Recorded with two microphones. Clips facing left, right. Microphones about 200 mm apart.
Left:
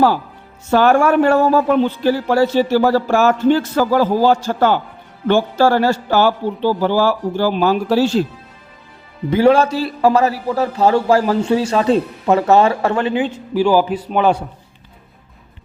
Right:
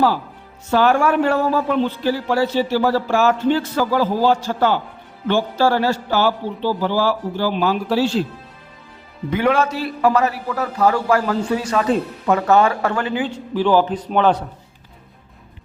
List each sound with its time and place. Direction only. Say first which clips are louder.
0.7 s a man's voice: left 3 dB; 50° left (ahead or behind)
9.3 s a man's voice: left 6 dB; 30° left (ahead or behind)
13.5 s a man's voice: left 2 dB; 10° left (ahead or behind)